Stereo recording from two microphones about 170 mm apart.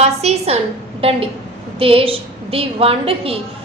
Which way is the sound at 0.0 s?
40° right (ahead or behind).